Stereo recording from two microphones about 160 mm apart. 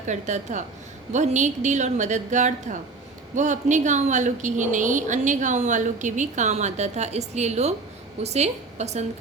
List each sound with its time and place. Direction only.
0.0 s a woman's voice: 45° right (ahead or behind)